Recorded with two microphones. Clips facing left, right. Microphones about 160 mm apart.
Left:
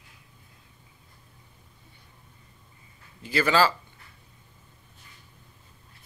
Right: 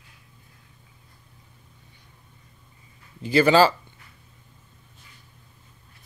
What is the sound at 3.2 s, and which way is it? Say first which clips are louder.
Speech: right 6 dB; 20° right (ahead or behind).